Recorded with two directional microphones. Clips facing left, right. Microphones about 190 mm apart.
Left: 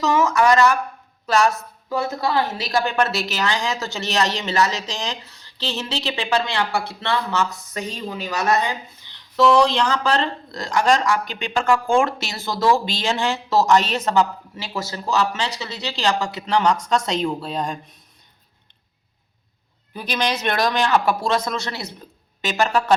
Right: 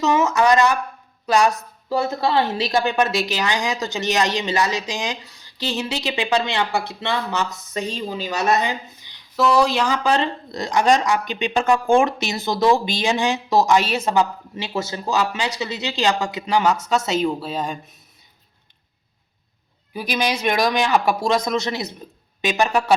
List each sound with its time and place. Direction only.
0.0 s a woman's voice: 20° right (ahead or behind)
1.9 s a woman's voice: 30° right (ahead or behind); by 17.7 s 5° right (ahead or behind)
19.9 s a woman's voice: 10° right (ahead or behind)